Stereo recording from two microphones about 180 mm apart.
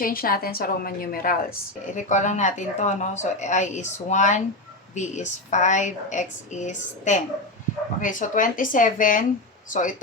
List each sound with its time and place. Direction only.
0.0 s a woman's voice: 55° left (ahead or behind)
2.0 s a woman's voice: 40° left (ahead or behind)